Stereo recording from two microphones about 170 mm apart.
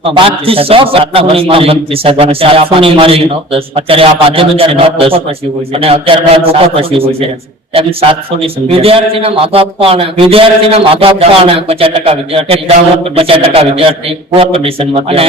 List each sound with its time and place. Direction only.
0.0 s a man's voice: 35° right (ahead or behind)